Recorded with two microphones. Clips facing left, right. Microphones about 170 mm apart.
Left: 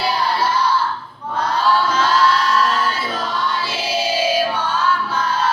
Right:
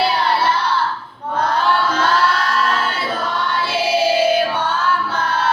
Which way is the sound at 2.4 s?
55° right (ahead or behind).